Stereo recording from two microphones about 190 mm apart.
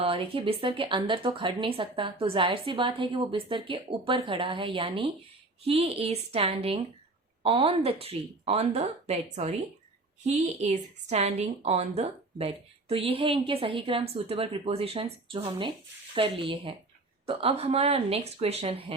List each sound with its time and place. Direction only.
0.0 s a woman's voice: 30° right (ahead or behind)